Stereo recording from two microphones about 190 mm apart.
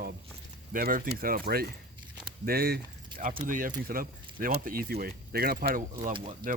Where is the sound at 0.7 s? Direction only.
45° right (ahead or behind).